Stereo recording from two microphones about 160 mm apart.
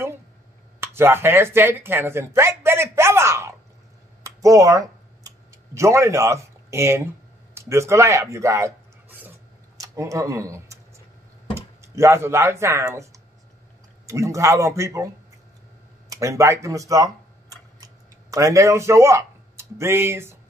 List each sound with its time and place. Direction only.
0.7 s a sound: 15° right (ahead or behind)
4.2 s computer keyboard: 20° right (ahead or behind)
5.8 s speech: 20° right (ahead or behind)
16.1 s speech: 20° right (ahead or behind)
18.3 s speech: 20° right (ahead or behind)